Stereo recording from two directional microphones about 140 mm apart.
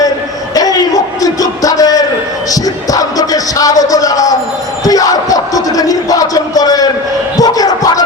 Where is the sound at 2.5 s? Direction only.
25° left (ahead or behind).